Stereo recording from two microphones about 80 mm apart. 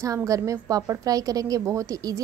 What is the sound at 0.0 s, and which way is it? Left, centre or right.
A woman's voice, right.